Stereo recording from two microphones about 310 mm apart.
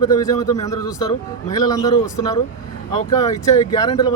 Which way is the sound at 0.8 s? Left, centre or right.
Left.